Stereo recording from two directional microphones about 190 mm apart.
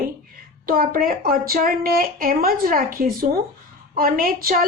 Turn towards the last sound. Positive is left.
turn(degrees=-50)  # may be behind; listen again after turning